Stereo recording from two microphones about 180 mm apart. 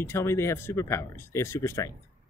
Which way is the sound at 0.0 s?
15° left (ahead or behind).